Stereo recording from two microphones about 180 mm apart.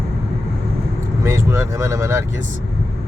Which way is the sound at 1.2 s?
15° right (ahead or behind).